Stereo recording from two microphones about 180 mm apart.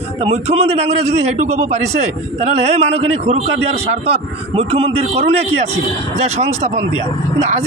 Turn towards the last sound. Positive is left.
turn(degrees=-40)  # may be behind; listen again after turning